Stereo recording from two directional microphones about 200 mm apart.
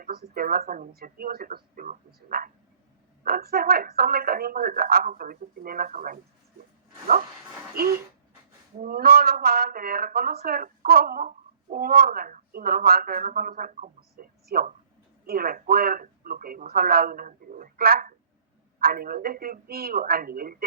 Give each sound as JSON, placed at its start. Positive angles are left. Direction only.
{"t": 0.0, "sound": "speech", "side_deg": -50}
{"t": 8.8, "sound": "speech", "side_deg": -50}